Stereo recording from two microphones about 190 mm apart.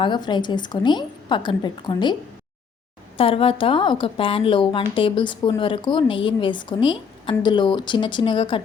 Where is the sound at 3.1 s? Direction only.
30° left (ahead or behind).